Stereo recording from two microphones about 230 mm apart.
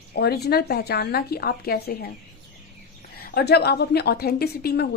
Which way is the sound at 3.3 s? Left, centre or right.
Left.